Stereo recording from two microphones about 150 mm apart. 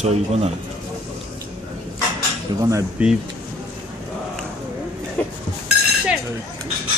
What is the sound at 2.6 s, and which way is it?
Speech, 20° right (ahead or behind).